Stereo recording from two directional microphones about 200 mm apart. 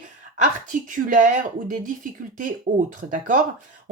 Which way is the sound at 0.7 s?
40° right (ahead or behind).